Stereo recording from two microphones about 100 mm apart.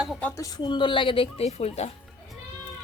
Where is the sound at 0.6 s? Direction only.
50° left (ahead or behind); by 1.9 s 90° left.